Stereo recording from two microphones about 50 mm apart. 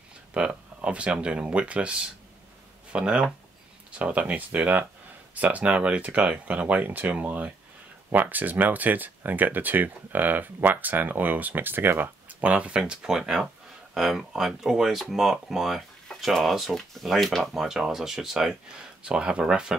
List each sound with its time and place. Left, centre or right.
0.3 s speech: right